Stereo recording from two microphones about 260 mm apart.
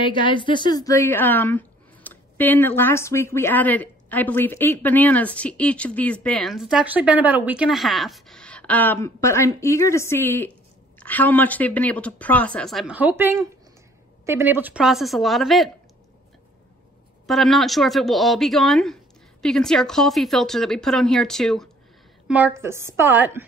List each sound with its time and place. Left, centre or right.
0.0 s a woman's voice: centre
17.3 s a woman's voice: centre